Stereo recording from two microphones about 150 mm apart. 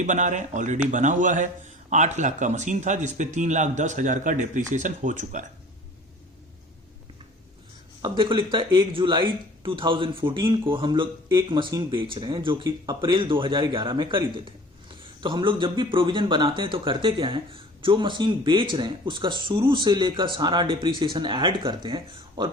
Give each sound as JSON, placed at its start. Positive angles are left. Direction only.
{"t": 0.0, "sound": "a man's voice", "side_deg": -55}
{"t": 8.0, "sound": "speech", "side_deg": -35}